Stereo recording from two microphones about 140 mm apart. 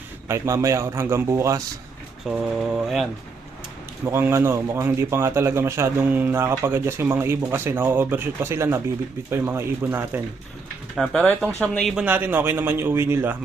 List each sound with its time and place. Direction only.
0.3 s a man's voice: 20° right (ahead or behind)
2.2 s speech: 5° right (ahead or behind)
4.0 s a man's voice: 15° right (ahead or behind)
10.9 s speech: centre (ahead or behind)
11.2 s speech: 10° left (ahead or behind)
11.9 s a man's voice: 10° right (ahead or behind)